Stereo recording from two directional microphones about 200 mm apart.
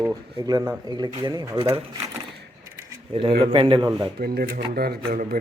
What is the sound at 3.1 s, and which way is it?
Speech, 25° right (ahead or behind).